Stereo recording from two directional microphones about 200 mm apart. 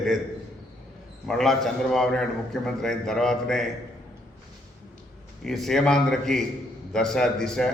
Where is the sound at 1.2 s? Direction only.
Centre (ahead or behind).